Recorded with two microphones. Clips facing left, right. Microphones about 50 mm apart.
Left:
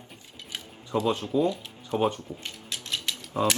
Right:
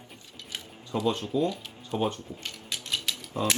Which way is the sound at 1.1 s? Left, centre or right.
Left.